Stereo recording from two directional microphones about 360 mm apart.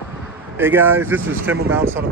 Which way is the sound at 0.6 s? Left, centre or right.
Centre.